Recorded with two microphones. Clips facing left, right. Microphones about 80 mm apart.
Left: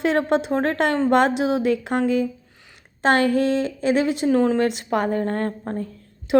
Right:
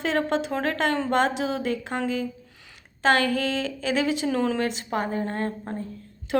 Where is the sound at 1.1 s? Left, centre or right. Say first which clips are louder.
Left 5 dB; left.